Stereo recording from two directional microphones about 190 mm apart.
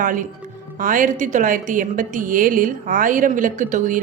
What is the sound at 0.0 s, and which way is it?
A woman's voice, 45° right (ahead or behind).